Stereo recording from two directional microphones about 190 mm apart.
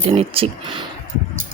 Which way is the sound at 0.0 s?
30° right (ahead or behind).